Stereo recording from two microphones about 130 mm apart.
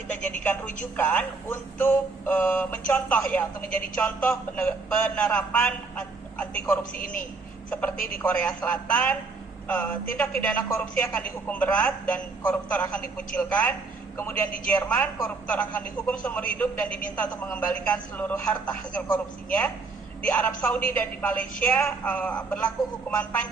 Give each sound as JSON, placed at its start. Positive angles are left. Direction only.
{"t": 0.2, "sound": "a man's voice", "side_deg": 10}
{"t": 6.3, "sound": "telephone", "side_deg": 10}
{"t": 7.0, "sound": "a man's voice", "side_deg": 10}